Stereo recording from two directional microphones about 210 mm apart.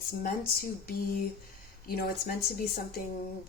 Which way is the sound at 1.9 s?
45° left (ahead or behind).